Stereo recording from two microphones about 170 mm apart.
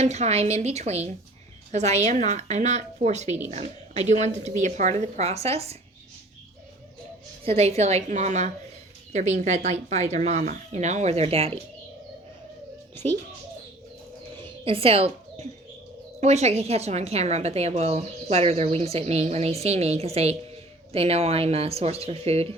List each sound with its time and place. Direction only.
0.0 s a woman's voice: 40° right (ahead or behind)
7.4 s a woman's voice: 40° right (ahead or behind)
14.4 s a sound: 35° right (ahead or behind)
16.2 s a woman's voice: 40° right (ahead or behind)